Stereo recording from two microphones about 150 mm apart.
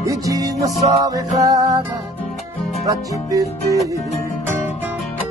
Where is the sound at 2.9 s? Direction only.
20° right (ahead or behind).